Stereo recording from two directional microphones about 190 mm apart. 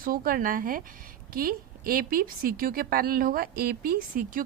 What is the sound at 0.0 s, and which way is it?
A woman's voice, 50° right (ahead or behind).